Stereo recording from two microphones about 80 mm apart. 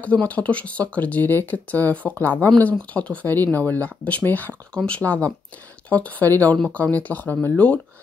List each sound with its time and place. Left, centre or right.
0.0 s speech: centre